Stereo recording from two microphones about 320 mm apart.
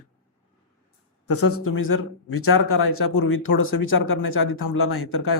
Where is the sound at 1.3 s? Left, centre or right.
Left.